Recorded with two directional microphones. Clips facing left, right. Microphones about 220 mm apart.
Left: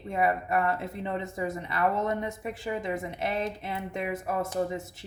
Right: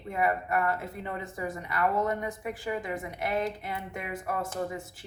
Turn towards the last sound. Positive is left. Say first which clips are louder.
# left 3 dB
turn(degrees=25)  # may be behind; listen again after turning